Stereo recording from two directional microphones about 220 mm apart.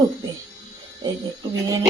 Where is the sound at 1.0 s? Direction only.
20° right (ahead or behind).